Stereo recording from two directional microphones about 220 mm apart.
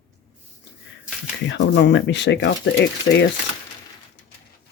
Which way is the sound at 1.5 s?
55° left (ahead or behind).